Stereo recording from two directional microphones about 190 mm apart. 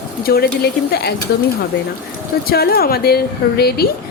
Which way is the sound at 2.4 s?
55° left (ahead or behind).